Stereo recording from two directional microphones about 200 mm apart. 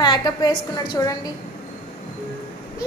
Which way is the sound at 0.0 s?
20° left (ahead or behind).